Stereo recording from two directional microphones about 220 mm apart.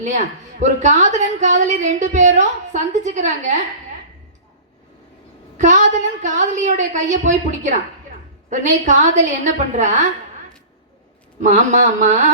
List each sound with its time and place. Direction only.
0.6 s a woman's voice: 35° right (ahead or behind)
5.5 s a woman's voice: 35° right (ahead or behind)
11.4 s a woman's voice: 35° right (ahead or behind)